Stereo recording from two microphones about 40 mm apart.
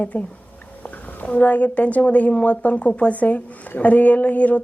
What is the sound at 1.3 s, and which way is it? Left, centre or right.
A woman's voice, left.